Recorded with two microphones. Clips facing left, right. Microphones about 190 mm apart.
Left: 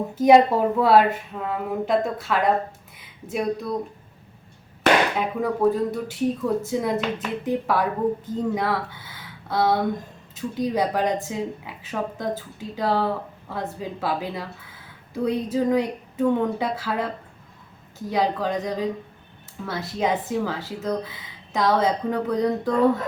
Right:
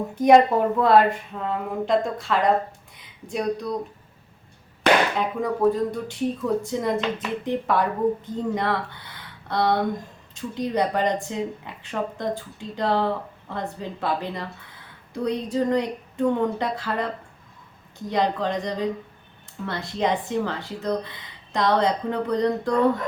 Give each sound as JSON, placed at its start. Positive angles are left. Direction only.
{"t": 0.2, "sound": "speech", "side_deg": 5}
{"t": 5.4, "sound": "speech", "side_deg": 5}
{"t": 18.1, "sound": "speech", "side_deg": 5}